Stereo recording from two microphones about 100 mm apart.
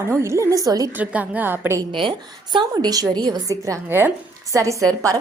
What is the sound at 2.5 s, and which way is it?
A woman's voice, 40° right (ahead or behind).